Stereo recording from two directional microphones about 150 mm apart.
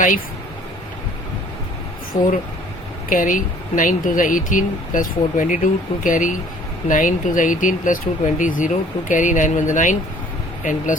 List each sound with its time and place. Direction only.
2.1 s speech: 60° left (ahead or behind)